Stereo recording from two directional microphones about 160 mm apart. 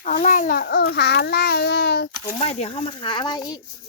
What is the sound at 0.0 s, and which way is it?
A child's voice, 50° left (ahead or behind).